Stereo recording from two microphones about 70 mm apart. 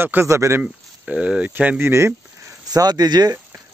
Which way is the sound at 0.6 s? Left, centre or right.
Centre.